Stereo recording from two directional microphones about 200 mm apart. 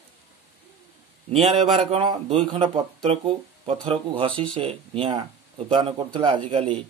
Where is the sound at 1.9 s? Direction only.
30° right (ahead or behind).